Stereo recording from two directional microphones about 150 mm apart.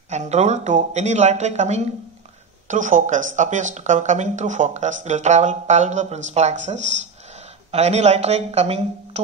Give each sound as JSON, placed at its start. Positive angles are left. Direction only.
{"t": 0.1, "sound": "speech", "side_deg": -50}